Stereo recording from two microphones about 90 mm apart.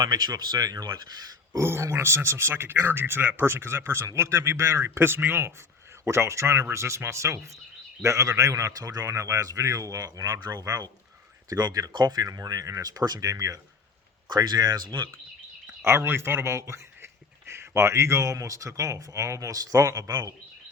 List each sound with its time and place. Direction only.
0.0 s speech: 45° right (ahead or behind)
1.5 s a man's voice: 30° right (ahead or behind)
14.3 s speech: 50° right (ahead or behind)
15.8 s a man's voice: 30° right (ahead or behind)